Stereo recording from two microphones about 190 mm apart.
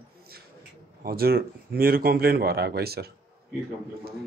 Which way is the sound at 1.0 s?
50° right (ahead or behind).